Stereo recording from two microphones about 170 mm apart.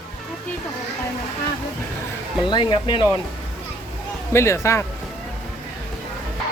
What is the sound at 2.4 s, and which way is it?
Speech, 25° left (ahead or behind).